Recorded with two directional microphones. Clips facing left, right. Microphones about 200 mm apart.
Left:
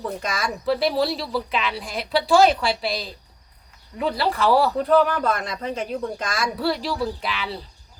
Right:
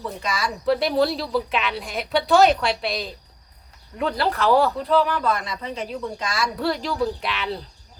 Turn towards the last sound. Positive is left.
turn(degrees=0)  # may be behind; listen again after turning